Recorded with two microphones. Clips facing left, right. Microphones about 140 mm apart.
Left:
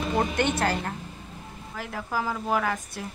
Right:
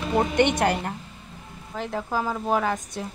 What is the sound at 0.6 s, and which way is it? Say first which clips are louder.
A woman's voice: right 3 dB; 15° right (ahead or behind).